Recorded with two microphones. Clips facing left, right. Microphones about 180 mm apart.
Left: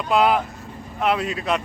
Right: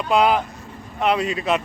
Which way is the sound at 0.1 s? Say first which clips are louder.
Right 1 dB; centre (ahead or behind).